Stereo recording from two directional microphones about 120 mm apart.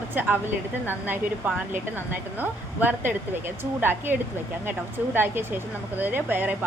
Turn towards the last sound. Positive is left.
turn(degrees=-15)  # may be behind; listen again after turning